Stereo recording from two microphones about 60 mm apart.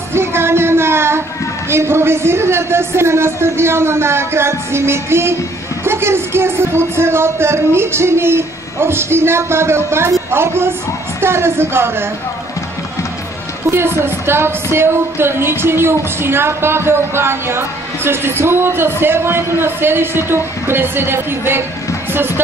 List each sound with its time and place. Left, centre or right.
0.1 s music: right
1.7 s speech: right
13.7 s speech: right